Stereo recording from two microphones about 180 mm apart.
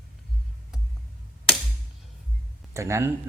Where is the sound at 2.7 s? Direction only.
15° right (ahead or behind).